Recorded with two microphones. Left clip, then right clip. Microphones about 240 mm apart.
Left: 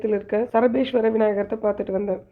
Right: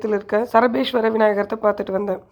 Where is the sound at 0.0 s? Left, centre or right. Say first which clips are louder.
Right 2 dB; centre.